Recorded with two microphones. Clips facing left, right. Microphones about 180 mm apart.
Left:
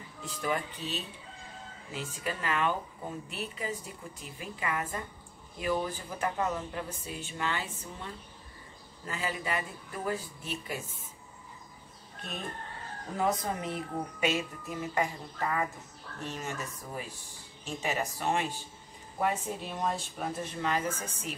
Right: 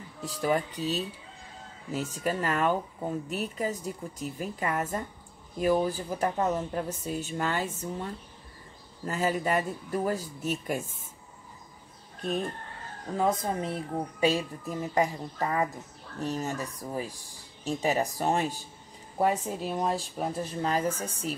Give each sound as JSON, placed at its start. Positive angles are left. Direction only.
{"t": 0.2, "sound": "speech", "side_deg": -35}
{"t": 13.2, "sound": "speech", "side_deg": -25}